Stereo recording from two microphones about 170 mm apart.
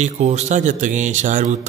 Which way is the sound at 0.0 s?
40° right (ahead or behind).